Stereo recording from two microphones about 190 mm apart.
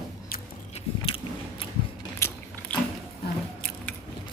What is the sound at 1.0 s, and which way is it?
Gears, 25° left (ahead or behind).